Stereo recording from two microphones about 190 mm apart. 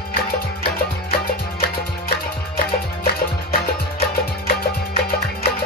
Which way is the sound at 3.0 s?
50° left (ahead or behind).